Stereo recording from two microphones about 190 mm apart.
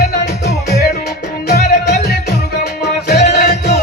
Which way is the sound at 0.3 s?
60° left (ahead or behind).